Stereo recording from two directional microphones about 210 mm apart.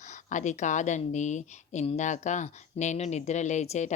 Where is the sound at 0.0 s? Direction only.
35° left (ahead or behind).